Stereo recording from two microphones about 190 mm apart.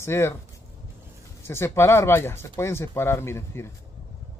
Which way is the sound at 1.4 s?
15° left (ahead or behind).